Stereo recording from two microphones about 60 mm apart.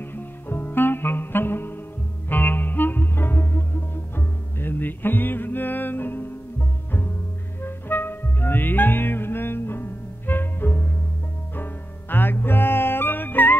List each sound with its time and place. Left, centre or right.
0.0 s music: left
7.6 s music: left